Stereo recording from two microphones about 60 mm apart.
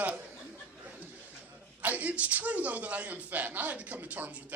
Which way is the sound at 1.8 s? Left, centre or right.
Right.